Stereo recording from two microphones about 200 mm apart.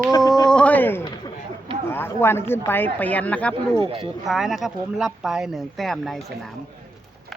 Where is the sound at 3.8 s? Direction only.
25° right (ahead or behind).